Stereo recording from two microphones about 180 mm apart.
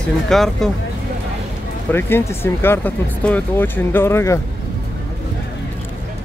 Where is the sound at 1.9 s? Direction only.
15° left (ahead or behind).